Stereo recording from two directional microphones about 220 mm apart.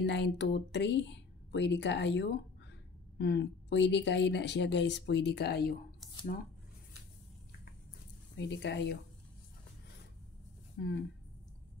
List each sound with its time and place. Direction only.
0.0 s speech: 50° left (ahead or behind)
8.4 s speech: 50° left (ahead or behind)
10.8 s speech: 45° left (ahead or behind)